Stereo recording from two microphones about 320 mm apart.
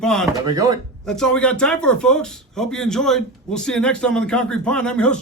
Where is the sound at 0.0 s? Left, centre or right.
Centre.